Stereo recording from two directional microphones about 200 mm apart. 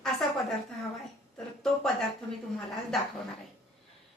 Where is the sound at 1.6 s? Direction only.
Centre (ahead or behind).